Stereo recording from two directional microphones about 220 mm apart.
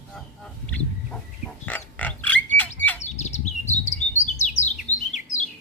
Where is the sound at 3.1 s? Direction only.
30° left (ahead or behind).